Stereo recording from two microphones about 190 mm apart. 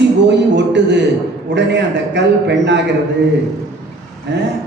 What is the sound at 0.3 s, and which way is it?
A man's voice, 65° right (ahead or behind).